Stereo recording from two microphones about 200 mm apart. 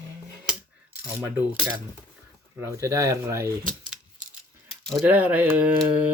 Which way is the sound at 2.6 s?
15° right (ahead or behind).